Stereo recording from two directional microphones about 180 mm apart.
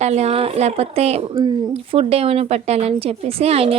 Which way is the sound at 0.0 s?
35° right (ahead or behind).